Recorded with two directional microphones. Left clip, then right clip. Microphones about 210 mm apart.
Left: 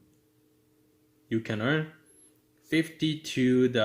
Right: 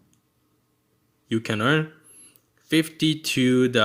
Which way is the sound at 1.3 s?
40° right (ahead or behind).